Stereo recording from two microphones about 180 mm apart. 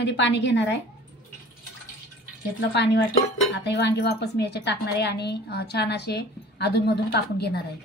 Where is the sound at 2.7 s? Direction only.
75° left (ahead or behind).